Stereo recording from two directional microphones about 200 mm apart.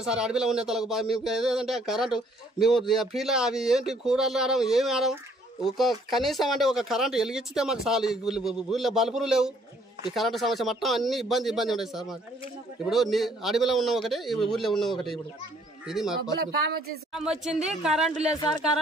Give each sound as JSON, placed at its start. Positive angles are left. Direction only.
{"t": 0.0, "sound": "a man's voice", "side_deg": -5}
{"t": 16.2, "sound": "speech", "side_deg": -50}
{"t": 17.1, "sound": "a man's voice", "side_deg": -5}